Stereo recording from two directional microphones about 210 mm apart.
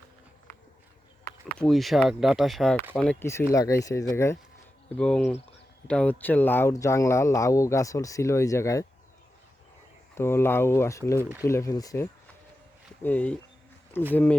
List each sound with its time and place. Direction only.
1.2 s speech: 5° left (ahead or behind)
10.2 s speech: 10° left (ahead or behind)